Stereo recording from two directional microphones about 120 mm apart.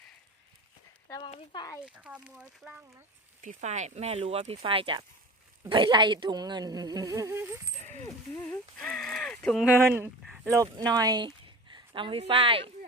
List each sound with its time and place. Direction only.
1.2 s speech: 40° left (ahead or behind)
1.8 s speech: 10° right (ahead or behind)
3.4 s speech: 80° right; by 5.0 s 50° right (ahead or behind)
5.6 s insect: 40° right (ahead or behind); by 7.6 s 20° right (ahead or behind)
7.8 s a sound: 90° right
8.8 s a sound: 5° left (ahead or behind)
10.5 s speech: 30° right (ahead or behind); by 12.7 s 50° right (ahead or behind)